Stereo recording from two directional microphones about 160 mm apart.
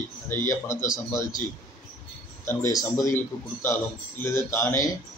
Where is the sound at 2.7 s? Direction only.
20° left (ahead or behind).